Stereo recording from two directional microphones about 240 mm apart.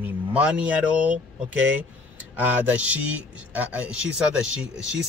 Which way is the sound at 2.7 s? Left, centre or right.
Centre.